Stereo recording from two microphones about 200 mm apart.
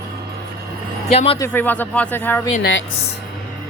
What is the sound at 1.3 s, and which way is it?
Speech, 10° left (ahead or behind).